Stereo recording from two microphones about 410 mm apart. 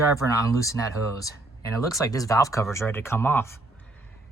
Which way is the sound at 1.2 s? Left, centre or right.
Centre.